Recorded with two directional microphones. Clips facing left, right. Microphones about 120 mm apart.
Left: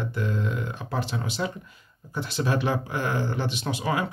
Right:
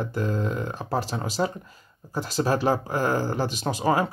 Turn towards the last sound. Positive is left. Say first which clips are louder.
# right 4 dB
turn(degrees=-40)  # may be behind; listen again after turning